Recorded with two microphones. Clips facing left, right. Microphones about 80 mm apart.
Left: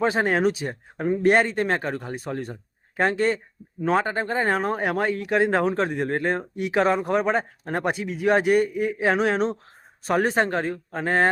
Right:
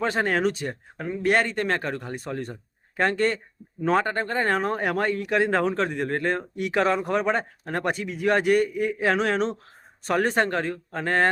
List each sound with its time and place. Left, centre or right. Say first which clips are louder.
0.0 s speech: left 2 dB; centre
1.0 s a man's voice: left 6 dB; left
1.3 s speech: left 1 dB; centre